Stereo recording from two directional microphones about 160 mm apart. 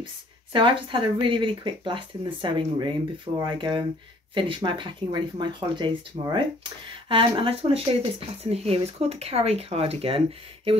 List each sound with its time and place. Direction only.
0.0 s speech: 30° right (ahead or behind)